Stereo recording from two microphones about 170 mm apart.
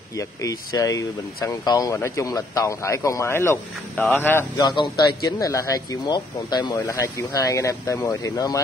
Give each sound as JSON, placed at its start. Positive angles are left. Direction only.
{"t": 0.2, "sound": "speech", "side_deg": 20}
{"t": 4.6, "sound": "speech", "side_deg": 25}